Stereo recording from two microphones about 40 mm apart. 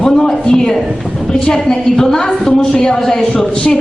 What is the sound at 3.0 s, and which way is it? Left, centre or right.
Speech, centre.